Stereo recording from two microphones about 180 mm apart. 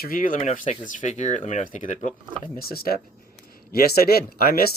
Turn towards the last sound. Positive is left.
turn(degrees=55)  # may be behind; listen again after turning